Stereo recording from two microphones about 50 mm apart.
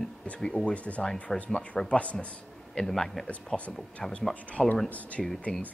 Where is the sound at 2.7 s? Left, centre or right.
Centre.